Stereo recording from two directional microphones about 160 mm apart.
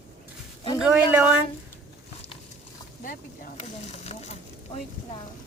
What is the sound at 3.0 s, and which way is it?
Speech, 55° left (ahead or behind).